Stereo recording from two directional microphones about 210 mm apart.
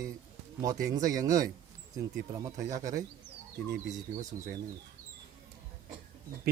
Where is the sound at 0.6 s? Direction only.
15° right (ahead or behind).